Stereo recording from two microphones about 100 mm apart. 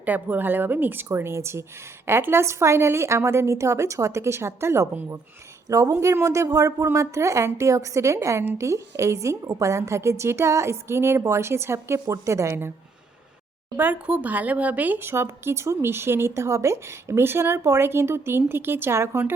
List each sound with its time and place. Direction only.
0.0 s a woman's voice: 15° right (ahead or behind)
13.7 s a woman's voice: 20° right (ahead or behind)